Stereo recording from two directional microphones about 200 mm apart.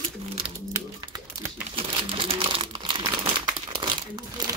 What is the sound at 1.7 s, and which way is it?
Crumpling, 25° right (ahead or behind).